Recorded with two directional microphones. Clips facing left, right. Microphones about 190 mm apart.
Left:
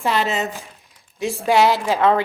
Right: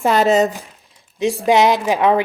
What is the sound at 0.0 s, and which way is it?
Speech, 45° right (ahead or behind).